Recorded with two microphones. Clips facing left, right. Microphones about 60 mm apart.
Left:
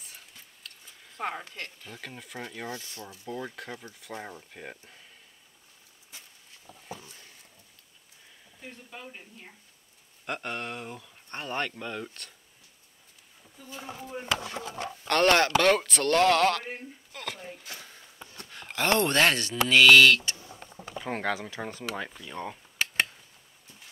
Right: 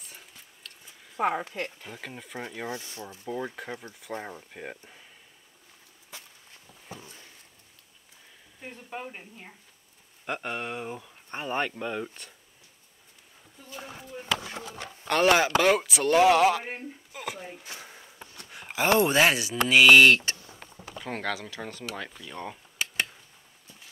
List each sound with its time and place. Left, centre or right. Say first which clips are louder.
0.0 s a sound: right 1 dB; centre
1.9 s speech: right 2 dB; centre
7.0 s a sound: right 2 dB; centre
8.5 s speech: right 2 dB; right
8.9 s speech: right 8 dB; right
10.2 s speech: right 2 dB; centre
15.0 s speech: even; centre
17.1 s a sound: right 1 dB; centre
21.0 s speech: left 2 dB; centre